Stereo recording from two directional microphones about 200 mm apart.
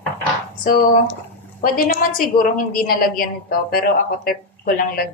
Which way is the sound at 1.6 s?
45° left (ahead or behind).